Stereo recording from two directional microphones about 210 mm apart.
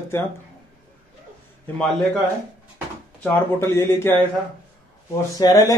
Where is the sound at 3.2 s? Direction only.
10° left (ahead or behind).